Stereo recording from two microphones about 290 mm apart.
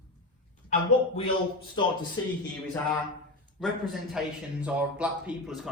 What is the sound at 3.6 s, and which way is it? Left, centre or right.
A man's voice, centre.